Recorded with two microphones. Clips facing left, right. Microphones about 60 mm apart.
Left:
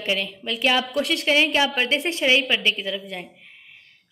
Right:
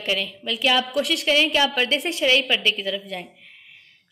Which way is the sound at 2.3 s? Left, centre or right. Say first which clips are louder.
Even; centre.